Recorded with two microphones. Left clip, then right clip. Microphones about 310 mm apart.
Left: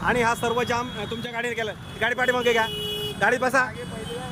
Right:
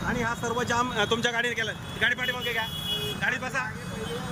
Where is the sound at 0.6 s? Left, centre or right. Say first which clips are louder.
Even; centre.